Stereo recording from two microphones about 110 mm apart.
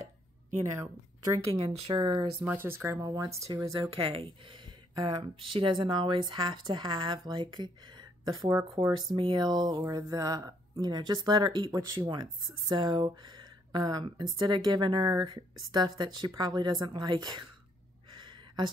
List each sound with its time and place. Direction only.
0.7 s speech: 30° right (ahead or behind)
1.7 s speech: 55° right (ahead or behind)
2.4 s speech: 20° right (ahead or behind)
4.1 s speech: 55° right (ahead or behind); by 8.5 s 35° right (ahead or behind)
8.8 s speech: 65° right (ahead or behind)
9.1 s speech: 45° right (ahead or behind)
18.1 s a sound: 45° right (ahead or behind)